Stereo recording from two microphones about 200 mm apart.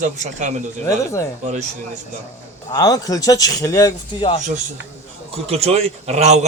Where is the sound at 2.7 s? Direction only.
20° left (ahead or behind).